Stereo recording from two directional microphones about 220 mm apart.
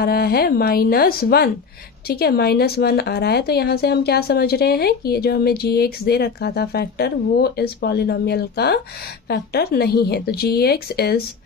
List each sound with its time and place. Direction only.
0.0 s speech: 45° left (ahead or behind)